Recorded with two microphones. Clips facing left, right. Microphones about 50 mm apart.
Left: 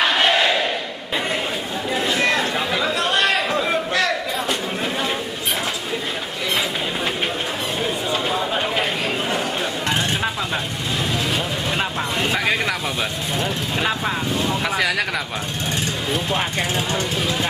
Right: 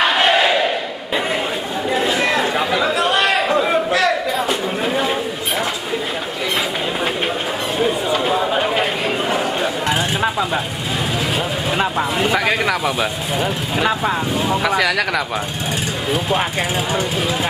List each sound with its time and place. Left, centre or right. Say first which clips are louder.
0.0 s battle cry: right 3 dB; centre
1.9 s chatter: right 2 dB; centre
7.8 s a sound: right 6 dB; centre
9.3 s chatter: right 4 dB; centre
11.7 s speech: right 6 dB; centre